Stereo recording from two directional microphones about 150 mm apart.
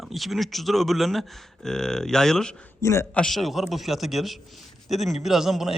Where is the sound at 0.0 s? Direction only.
Centre (ahead or behind).